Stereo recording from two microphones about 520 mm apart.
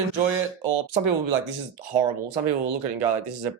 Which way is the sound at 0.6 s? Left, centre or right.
Right.